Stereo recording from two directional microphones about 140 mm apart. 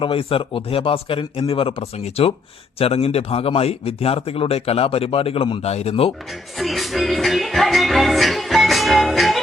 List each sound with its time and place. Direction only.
0.0 s a man's voice: 40° left (ahead or behind)
6.6 s music: centre (ahead or behind)